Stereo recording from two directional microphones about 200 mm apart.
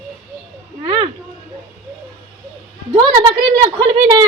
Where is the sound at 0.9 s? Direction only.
25° right (ahead or behind).